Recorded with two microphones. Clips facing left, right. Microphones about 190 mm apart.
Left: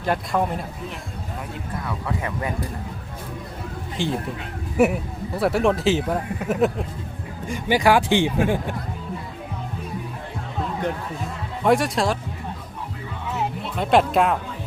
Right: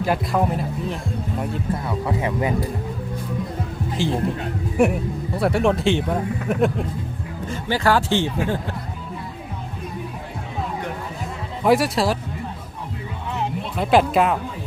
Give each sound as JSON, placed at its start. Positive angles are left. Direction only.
{"t": 0.0, "sound": "speech", "side_deg": -5}
{"t": 1.9, "sound": "speech", "side_deg": -25}
{"t": 4.0, "sound": "speech", "side_deg": 0}
{"t": 7.4, "sound": "a man's voice", "side_deg": 15}
{"t": 11.6, "sound": "speech", "side_deg": -5}
{"t": 13.3, "sound": "music", "side_deg": 0}